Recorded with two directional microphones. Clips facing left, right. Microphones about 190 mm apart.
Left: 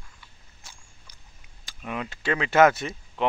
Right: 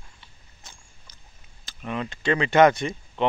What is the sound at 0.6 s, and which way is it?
Rodents, 10° left (ahead or behind).